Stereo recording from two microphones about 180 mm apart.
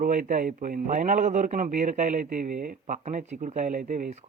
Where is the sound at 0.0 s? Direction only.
45° right (ahead or behind).